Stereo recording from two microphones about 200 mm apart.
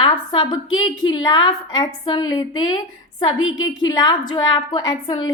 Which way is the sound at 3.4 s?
80° left.